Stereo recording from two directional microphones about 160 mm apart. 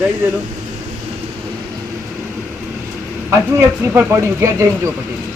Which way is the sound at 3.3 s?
15° right (ahead or behind).